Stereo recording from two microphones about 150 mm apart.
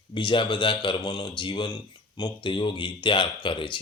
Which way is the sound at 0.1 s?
30° left (ahead or behind).